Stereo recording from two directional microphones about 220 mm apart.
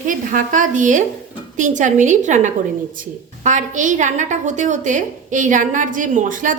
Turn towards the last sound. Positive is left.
turn(degrees=-35)  # may be behind; listen again after turning